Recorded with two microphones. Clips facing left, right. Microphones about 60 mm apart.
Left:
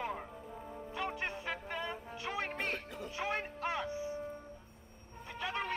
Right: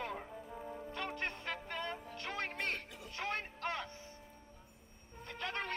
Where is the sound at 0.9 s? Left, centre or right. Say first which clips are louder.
Left 4 dB; centre.